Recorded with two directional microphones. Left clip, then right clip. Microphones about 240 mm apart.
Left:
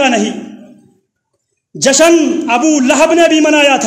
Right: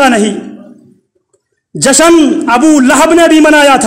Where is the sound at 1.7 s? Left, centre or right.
Right.